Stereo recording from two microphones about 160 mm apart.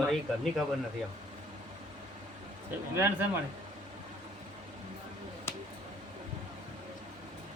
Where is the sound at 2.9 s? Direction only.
15° right (ahead or behind).